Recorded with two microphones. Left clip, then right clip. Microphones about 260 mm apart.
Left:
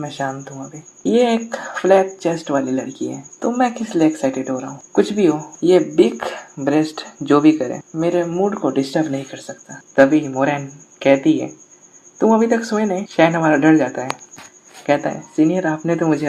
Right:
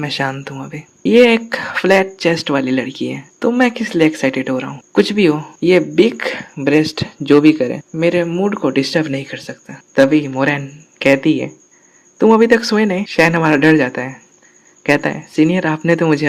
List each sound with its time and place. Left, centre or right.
0.0 s speech: right
12.2 s speech: right